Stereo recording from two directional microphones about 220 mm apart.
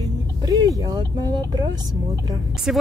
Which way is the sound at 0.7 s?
15° right (ahead or behind).